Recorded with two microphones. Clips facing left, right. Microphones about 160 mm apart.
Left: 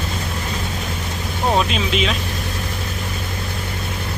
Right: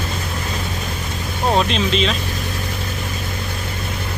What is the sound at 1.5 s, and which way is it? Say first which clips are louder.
Speech: right 1 dB; 5° left (ahead or behind).